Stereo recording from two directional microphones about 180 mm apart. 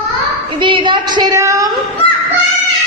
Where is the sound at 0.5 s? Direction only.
25° right (ahead or behind).